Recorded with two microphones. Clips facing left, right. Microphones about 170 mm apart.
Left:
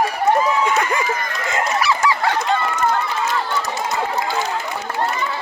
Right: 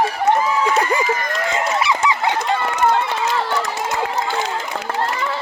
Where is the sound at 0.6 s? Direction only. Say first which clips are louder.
Right 1 dB; 30° right (ahead or behind).